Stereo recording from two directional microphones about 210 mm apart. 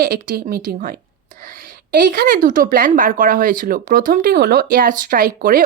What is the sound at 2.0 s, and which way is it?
Speech, 45° right (ahead or behind).